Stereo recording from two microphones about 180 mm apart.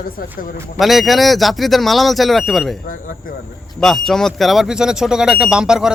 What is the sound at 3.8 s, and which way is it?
Speech, centre (ahead or behind).